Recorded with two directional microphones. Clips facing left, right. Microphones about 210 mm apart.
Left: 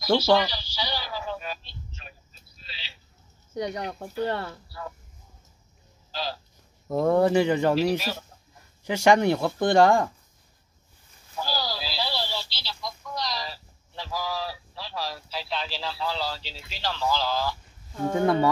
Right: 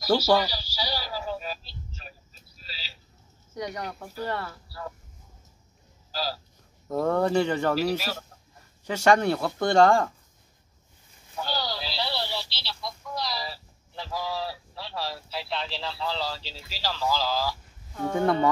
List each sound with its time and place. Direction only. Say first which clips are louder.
0.1 s speech: left 1 dB; 5° right (ahead or behind)
0.6 s a sound: even; 35° right (ahead or behind)
2.6 s a sound: right 1 dB; 35° right (ahead or behind)
3.5 s speech: left 3 dB; 30° left (ahead or behind)
6.9 s speech: left 3 dB; 10° left (ahead or behind)
8.8 s speech: left 2 dB; 10° left (ahead or behind)
11.3 s telephone: even; centre (ahead or behind)
14.2 s speech: right 1 dB; centre (ahead or behind)